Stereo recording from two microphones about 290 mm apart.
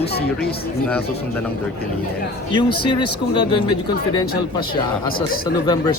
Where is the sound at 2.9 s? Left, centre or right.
Centre.